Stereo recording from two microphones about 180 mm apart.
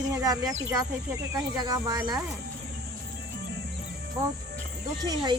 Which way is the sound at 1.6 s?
20° right (ahead or behind).